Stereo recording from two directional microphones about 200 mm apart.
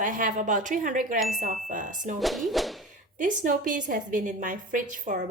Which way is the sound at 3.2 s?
40° right (ahead or behind).